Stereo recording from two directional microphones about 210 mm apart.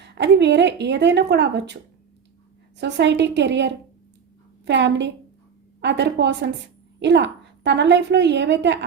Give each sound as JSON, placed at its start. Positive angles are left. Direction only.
{"t": 0.0, "sound": "a woman's voice", "side_deg": -55}
{"t": 2.7, "sound": "a woman's voice", "side_deg": -55}